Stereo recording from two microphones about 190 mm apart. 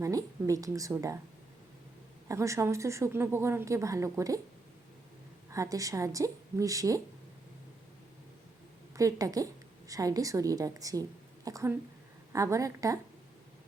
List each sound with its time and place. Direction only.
0.0 s a woman's voice: 15° right (ahead or behind)
2.2 s a woman's voice: 15° right (ahead or behind)
5.5 s a woman's voice: 15° right (ahead or behind)
9.0 s a woman's voice: 15° right (ahead or behind)